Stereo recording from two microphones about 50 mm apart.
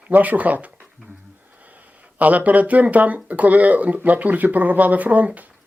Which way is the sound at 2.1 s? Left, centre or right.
Right.